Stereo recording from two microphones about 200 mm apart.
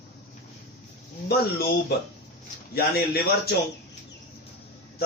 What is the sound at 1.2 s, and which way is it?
A man's voice, 50° left (ahead or behind).